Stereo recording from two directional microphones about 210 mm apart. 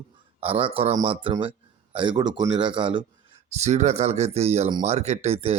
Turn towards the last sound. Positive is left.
turn(degrees=-30)  # may be behind; listen again after turning